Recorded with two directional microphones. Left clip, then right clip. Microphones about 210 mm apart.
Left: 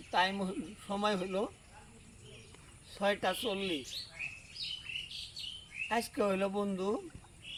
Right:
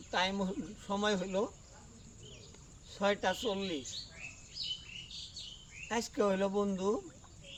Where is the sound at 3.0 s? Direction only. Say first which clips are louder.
Even; 15° right (ahead or behind).